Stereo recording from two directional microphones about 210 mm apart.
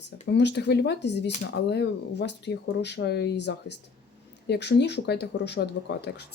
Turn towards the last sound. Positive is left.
turn(degrees=55)  # may be behind; listen again after turning